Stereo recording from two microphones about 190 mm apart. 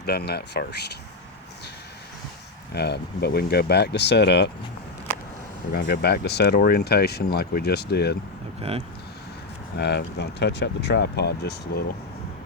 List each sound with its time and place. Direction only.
0.0 s speech: 55° left (ahead or behind)
2.7 s speech: 60° left (ahead or behind)
5.7 s speech: 55° left (ahead or behind)
9.7 s speech: 65° left (ahead or behind)